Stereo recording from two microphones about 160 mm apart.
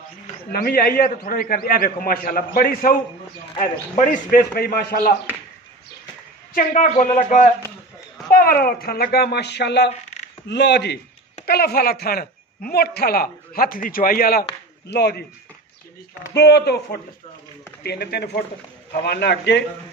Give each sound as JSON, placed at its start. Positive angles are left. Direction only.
{"t": 0.5, "sound": "a man's voice", "side_deg": 70}
{"t": 3.5, "sound": "a man's voice", "side_deg": 55}
{"t": 6.5, "sound": "a man's voice", "side_deg": 55}
{"t": 8.3, "sound": "a man's voice", "side_deg": 65}
{"t": 11.4, "sound": "a man's voice", "side_deg": 75}
{"t": 14.9, "sound": "speech", "side_deg": 90}
{"t": 16.3, "sound": "speech", "side_deg": 90}